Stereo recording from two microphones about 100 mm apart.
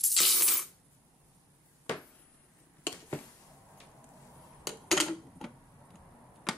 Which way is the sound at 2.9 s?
15° left (ahead or behind).